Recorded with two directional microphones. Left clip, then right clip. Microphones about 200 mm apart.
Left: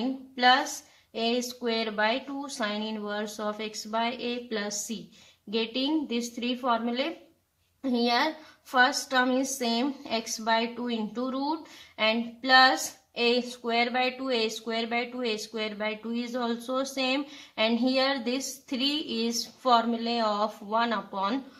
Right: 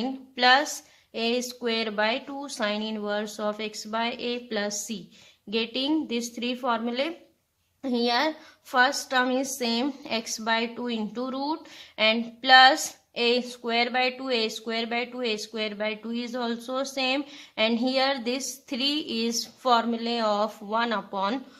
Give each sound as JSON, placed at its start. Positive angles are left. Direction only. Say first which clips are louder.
{"t": 1.1, "sound": "a woman's voice", "louder": "right 1 dB", "side_deg": -45}